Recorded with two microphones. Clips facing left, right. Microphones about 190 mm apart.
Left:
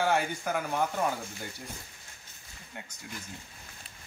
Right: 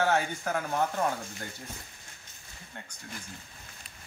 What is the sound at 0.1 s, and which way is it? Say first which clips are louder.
Speech: even; 5° left (ahead or behind).